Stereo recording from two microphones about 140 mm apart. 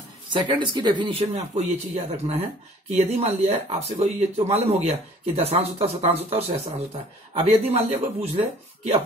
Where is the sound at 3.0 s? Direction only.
50° right (ahead or behind).